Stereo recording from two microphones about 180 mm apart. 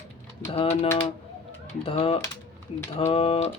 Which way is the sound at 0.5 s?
30° left (ahead or behind).